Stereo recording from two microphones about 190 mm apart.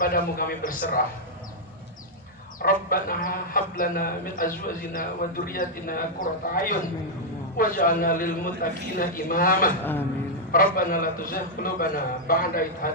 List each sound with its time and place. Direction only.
0.0 s a man's voice: 45° left (ahead or behind)
2.6 s a man's voice: 50° left (ahead or behind)
9.7 s a sound: 10° left (ahead or behind)
10.5 s a man's voice: 45° left (ahead or behind)